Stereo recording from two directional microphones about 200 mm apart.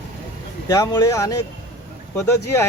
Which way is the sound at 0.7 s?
15° left (ahead or behind).